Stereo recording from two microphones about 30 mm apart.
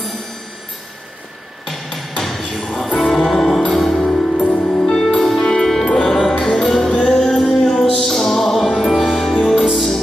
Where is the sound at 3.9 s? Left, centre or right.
Left.